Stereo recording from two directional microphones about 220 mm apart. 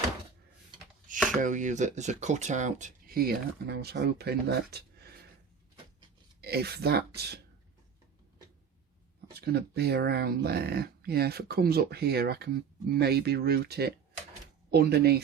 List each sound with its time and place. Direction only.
1.4 s speech: 35° right (ahead or behind)
6.4 s speech: 45° right (ahead or behind)
9.5 s speech: 45° right (ahead or behind)